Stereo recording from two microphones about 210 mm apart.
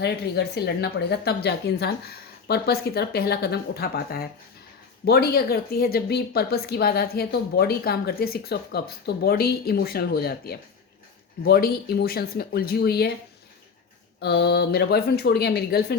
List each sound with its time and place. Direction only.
0.0 s a woman's voice: 50° left (ahead or behind)
14.2 s a woman's voice: 50° left (ahead or behind)